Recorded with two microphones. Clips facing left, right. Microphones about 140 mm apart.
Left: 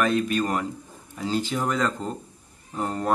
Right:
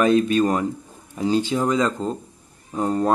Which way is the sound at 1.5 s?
15° right (ahead or behind).